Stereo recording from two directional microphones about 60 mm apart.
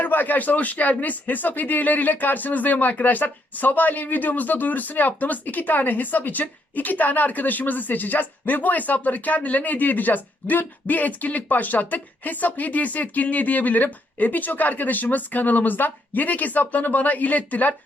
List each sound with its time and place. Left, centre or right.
0.0 s speech: left